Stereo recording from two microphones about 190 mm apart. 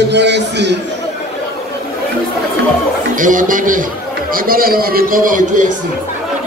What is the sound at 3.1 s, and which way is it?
A man's voice, 45° right (ahead or behind).